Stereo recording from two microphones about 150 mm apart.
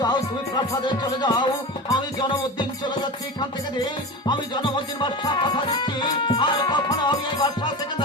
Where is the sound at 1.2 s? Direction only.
30° left (ahead or behind).